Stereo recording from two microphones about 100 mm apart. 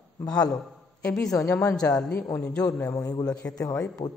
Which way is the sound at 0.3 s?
10° left (ahead or behind).